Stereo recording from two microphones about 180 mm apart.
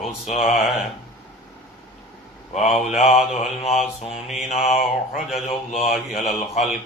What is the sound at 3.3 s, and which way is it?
Speech, 35° left (ahead or behind).